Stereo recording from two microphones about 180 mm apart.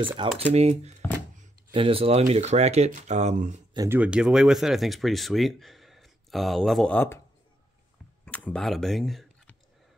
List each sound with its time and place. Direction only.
0.4 s speech: 35° right (ahead or behind)
3.7 s speech: 20° right (ahead or behind)
4.0 s speech: 5° right (ahead or behind)
8.3 s speech: 5° left (ahead or behind)